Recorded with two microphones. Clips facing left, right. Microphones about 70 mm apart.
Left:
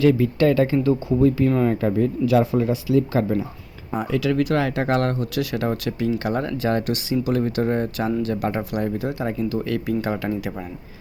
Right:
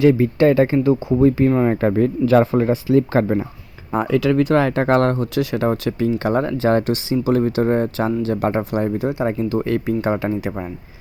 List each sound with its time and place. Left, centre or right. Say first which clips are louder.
0.0 s speech: right 3 dB; right
3.9 s speech: right 5 dB; right
9.4 s speech: right 4 dB; right